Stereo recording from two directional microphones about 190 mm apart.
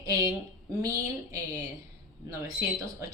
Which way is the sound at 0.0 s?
20° right (ahead or behind).